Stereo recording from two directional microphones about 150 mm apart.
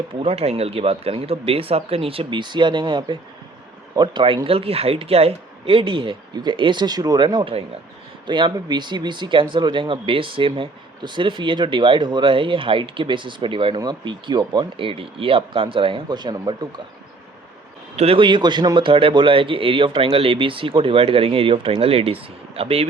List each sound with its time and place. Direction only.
0.2 s speech: 45° right (ahead or behind); by 16.8 s 25° right (ahead or behind)
17.9 s speech: 40° right (ahead or behind)